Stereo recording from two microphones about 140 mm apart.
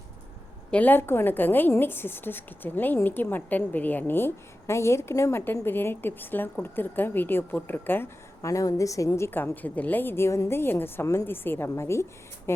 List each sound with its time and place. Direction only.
0.7 s a woman's voice: 10° left (ahead or behind)